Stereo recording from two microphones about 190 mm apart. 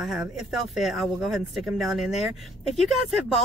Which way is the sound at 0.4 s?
Centre (ahead or behind).